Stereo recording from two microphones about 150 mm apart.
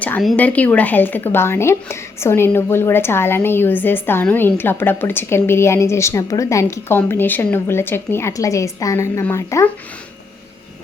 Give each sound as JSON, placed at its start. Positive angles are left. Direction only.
{"t": 0.3, "sound": "speech", "side_deg": 10}